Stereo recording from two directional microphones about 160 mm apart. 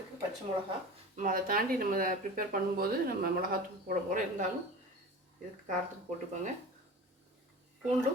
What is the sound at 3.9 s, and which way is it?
Speech, 50° right (ahead or behind).